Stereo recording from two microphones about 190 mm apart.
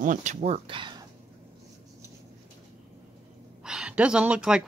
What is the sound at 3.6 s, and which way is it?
A woman's voice, 5° right (ahead or behind).